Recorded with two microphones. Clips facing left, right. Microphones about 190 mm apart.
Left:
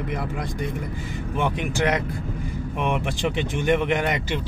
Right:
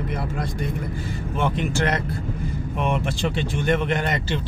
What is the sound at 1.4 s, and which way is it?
Speech, 15° left (ahead or behind).